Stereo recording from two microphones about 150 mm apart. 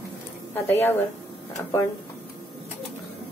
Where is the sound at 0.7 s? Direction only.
15° left (ahead or behind).